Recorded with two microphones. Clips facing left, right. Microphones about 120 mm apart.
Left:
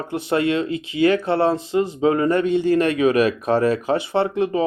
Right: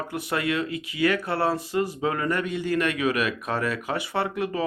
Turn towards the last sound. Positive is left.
turn(degrees=25)  # may be behind; listen again after turning